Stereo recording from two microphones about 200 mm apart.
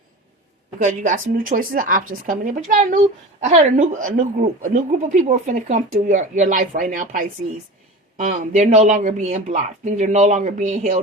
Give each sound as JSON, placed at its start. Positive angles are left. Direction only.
{"t": 0.8, "sound": "a woman's voice", "side_deg": -40}